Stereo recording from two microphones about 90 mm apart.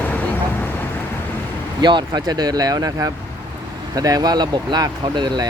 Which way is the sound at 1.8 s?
55° right (ahead or behind).